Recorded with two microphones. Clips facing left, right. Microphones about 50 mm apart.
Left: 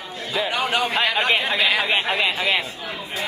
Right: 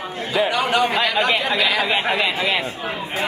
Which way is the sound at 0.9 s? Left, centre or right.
Left.